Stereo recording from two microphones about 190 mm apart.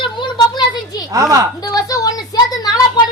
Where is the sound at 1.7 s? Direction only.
20° left (ahead or behind).